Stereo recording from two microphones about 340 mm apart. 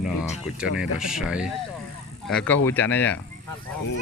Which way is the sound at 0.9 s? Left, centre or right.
Centre.